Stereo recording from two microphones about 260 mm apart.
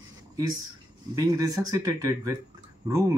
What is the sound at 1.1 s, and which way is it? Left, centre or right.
A man's voice, centre.